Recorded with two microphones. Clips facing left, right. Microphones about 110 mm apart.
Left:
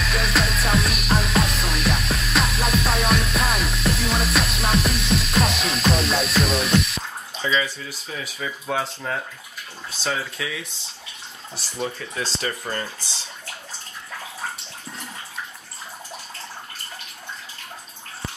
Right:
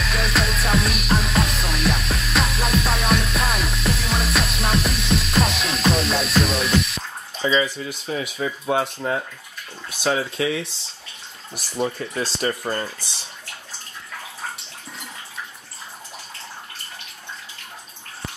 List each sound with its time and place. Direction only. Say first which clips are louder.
0.0 s music: even; centre (ahead or behind)
7.4 s speech: right 4 dB; 20° right (ahead or behind)
10.4 s speech: right 8 dB; 35° right (ahead or behind)
11.5 s speech: right 4 dB; 15° right (ahead or behind)
12.4 s speech: right 5 dB; 30° right (ahead or behind)